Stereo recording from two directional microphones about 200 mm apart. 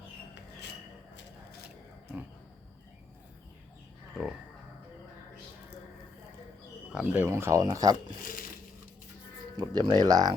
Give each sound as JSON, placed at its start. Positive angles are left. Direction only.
{"t": 4.1, "sound": "speech", "side_deg": -5}
{"t": 6.9, "sound": "speech", "side_deg": -10}
{"t": 7.9, "sound": "a sound", "side_deg": 45}
{"t": 9.6, "sound": "speech", "side_deg": -20}